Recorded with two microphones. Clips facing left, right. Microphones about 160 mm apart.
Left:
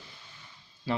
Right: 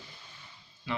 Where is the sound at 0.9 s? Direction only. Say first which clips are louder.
Left 4 dB; 35° left (ahead or behind).